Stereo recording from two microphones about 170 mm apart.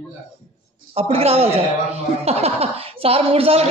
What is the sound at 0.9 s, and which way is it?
Speech, 35° right (ahead or behind).